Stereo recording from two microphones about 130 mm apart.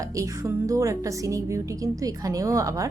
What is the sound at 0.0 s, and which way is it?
A woman's voice, 25° right (ahead or behind).